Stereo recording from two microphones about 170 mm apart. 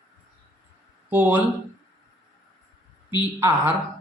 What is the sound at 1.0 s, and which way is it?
Speech, 10° right (ahead or behind).